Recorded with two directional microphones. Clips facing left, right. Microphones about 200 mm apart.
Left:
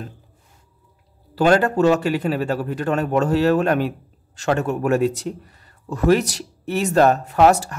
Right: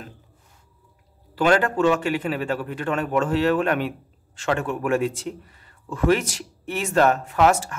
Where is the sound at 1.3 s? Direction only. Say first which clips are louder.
Left 3 dB; 40° left (ahead or behind).